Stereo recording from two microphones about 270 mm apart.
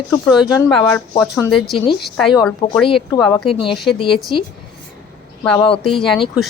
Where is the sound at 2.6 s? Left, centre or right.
Centre.